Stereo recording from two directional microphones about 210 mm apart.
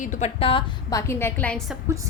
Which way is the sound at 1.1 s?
10° left (ahead or behind).